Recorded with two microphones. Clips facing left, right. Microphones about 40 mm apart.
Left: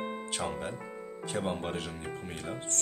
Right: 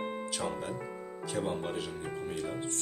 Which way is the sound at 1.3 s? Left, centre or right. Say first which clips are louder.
Even; left.